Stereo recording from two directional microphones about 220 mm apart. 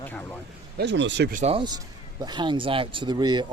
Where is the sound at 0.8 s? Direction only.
55° right (ahead or behind).